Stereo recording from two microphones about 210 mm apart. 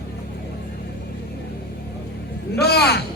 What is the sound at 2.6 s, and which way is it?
Speech, 50° left (ahead or behind).